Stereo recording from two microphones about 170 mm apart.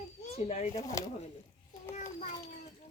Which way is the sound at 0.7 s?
20° left (ahead or behind).